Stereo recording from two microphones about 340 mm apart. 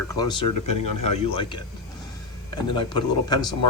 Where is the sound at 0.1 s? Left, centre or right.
Centre.